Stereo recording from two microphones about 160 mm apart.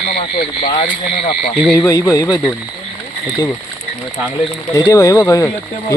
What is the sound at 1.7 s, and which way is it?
Speech, 15° left (ahead or behind).